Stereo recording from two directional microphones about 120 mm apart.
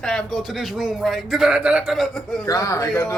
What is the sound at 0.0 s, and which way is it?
A man's voice, 5° left (ahead or behind).